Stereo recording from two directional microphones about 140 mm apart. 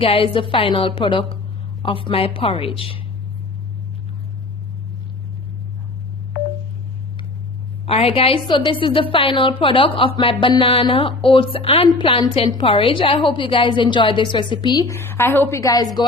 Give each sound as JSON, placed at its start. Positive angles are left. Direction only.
{"t": 0.0, "sound": "a woman's voice", "side_deg": 40}
{"t": 7.9, "sound": "a woman's voice", "side_deg": 45}
{"t": 14.8, "sound": "a woman's voice", "side_deg": 15}